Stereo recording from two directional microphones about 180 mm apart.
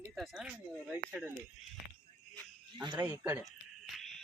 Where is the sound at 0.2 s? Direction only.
5° right (ahead or behind).